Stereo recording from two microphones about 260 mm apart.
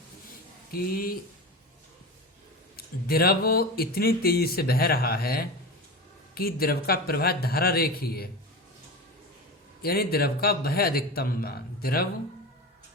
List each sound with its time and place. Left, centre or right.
0.7 s speech: left
2.7 s speech: left
9.8 s speech: left